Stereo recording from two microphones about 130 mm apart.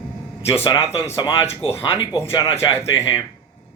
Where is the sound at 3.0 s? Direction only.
20° left (ahead or behind).